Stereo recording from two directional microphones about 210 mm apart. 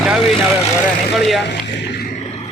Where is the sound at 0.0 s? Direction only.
Centre (ahead or behind).